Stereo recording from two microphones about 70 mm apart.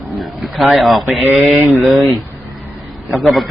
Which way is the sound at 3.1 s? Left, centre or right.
Centre.